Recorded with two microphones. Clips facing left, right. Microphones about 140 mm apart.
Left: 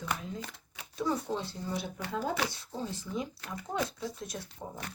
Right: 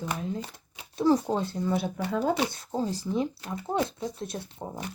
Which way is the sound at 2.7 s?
35° right (ahead or behind).